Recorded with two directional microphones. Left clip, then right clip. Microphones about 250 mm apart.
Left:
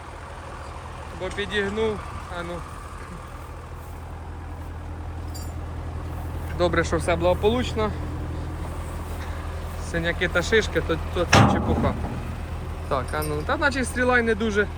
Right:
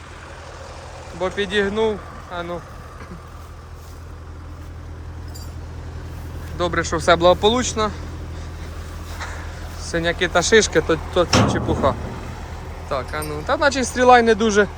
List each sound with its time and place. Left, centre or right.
1.2 s speech: right
6.6 s speech: centre
7.0 s speech: centre
9.9 s speech: centre
12.9 s speech: centre; by 14.7 s right